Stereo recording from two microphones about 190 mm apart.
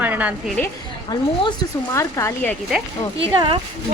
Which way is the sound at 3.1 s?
30° right (ahead or behind).